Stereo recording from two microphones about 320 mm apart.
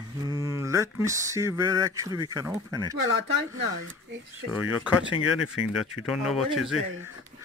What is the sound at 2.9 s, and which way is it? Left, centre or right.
Speech, right.